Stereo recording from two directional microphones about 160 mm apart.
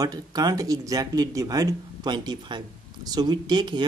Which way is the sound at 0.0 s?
25° right (ahead or behind).